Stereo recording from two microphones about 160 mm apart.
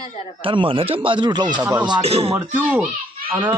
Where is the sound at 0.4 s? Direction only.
35° right (ahead or behind).